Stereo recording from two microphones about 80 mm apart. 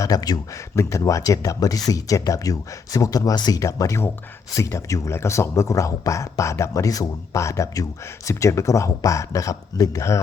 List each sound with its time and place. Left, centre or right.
0.0 s speech: left
0.8 s speech: left
3.6 s speech: left